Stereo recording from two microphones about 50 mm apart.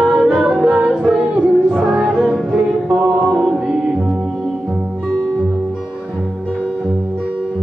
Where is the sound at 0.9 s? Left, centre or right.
Centre.